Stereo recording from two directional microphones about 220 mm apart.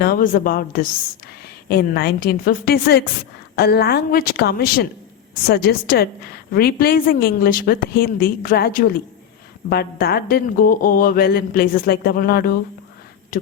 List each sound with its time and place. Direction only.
0.0 s a woman's voice: 40° left (ahead or behind)
13.3 s beatboxing: 35° left (ahead or behind)